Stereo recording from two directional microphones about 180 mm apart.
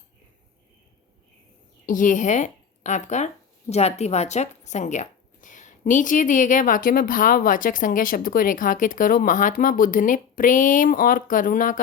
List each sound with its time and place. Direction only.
1.9 s a woman's voice: 45° left (ahead or behind)